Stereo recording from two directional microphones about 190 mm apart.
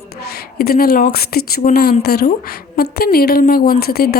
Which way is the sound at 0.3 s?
55° left (ahead or behind).